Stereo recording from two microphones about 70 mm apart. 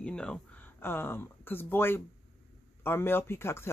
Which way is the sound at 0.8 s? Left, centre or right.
Left.